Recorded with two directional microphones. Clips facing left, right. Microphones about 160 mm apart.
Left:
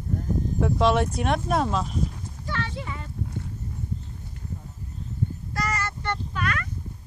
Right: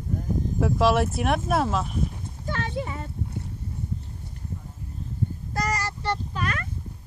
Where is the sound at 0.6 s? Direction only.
5° right (ahead or behind).